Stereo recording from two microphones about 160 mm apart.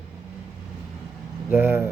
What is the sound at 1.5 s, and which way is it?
Speech, 10° right (ahead or behind).